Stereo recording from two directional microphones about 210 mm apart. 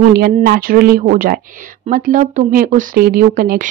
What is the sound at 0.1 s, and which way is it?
A woman's voice, 45° right (ahead or behind).